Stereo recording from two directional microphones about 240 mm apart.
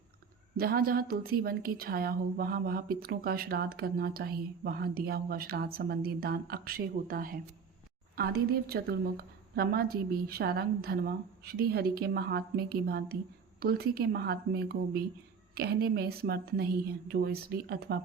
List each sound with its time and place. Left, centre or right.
0.5 s a woman's voice: right